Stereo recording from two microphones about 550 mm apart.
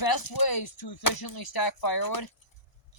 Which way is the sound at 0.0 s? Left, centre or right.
Left.